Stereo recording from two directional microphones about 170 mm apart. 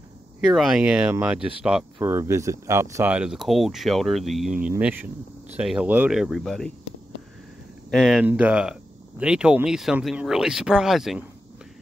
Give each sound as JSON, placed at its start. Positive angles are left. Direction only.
{"t": 0.6, "sound": "speech", "side_deg": 0}
{"t": 2.0, "sound": "speech", "side_deg": -15}
{"t": 7.9, "sound": "speech", "side_deg": 0}